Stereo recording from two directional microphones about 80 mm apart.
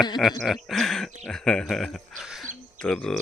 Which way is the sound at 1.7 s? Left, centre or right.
Centre.